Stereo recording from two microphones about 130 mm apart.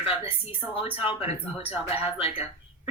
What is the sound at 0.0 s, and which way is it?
Speech, 45° left (ahead or behind).